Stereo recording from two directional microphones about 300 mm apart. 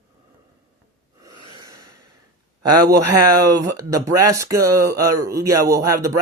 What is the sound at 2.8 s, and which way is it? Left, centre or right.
Speech, centre.